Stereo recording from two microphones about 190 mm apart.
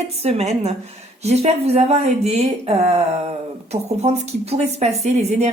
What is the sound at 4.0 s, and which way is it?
A woman's voice, 35° right (ahead or behind).